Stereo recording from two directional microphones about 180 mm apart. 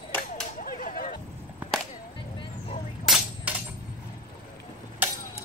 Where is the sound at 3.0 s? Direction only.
Centre (ahead or behind).